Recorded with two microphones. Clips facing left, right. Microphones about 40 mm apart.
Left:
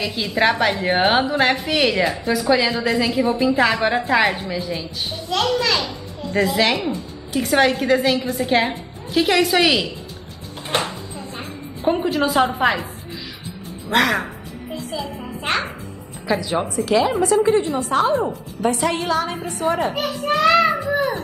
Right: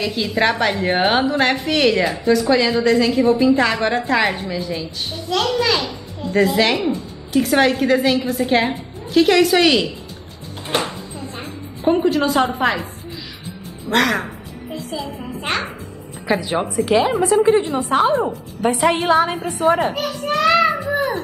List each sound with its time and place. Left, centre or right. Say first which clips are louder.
0.0 s a woman's voice: right 1 dB; centre
10.7 s music: right 1 dB; centre
13.8 s a child's voice: even; centre
16.3 s a woman's voice: right 1 dB; right
19.9 s children playing: even; centre